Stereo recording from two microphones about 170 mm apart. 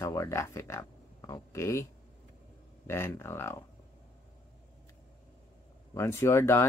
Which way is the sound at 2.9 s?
15° left (ahead or behind).